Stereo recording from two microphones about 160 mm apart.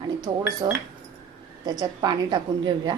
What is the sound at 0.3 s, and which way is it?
A woman's voice, 25° right (ahead or behind).